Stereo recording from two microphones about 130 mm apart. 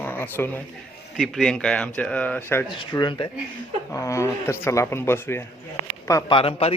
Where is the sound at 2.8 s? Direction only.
35° left (ahead or behind).